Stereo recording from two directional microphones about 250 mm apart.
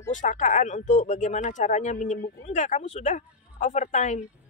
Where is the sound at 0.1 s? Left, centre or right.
Left.